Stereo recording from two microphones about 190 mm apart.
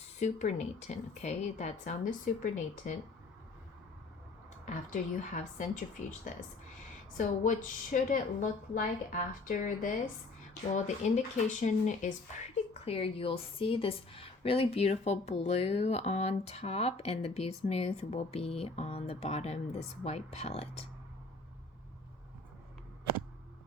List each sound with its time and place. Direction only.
0.2 s a woman's voice: 35° left (ahead or behind)
4.6 s a woman's voice: 40° left (ahead or behind)
7.9 s a woman's voice: 45° left (ahead or behind)
12.8 s a woman's voice: 30° left (ahead or behind)